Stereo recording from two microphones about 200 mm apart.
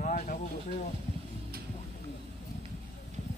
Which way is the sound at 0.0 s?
40° left (ahead or behind).